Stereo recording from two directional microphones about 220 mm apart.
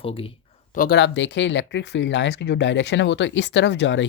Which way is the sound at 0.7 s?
45° left (ahead or behind).